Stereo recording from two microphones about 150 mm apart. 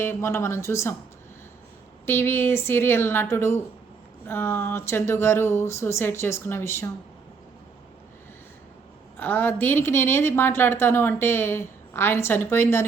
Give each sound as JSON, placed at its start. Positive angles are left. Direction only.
{"t": 0.0, "sound": "a woman's voice", "side_deg": 15}
{"t": 2.0, "sound": "a woman's voice", "side_deg": 15}
{"t": 9.1, "sound": "a woman's voice", "side_deg": 15}